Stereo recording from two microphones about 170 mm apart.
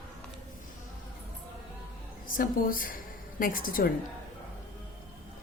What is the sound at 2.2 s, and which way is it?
A woman's voice, 55° left (ahead or behind).